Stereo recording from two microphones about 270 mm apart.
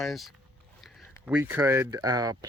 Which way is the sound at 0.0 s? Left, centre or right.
Centre.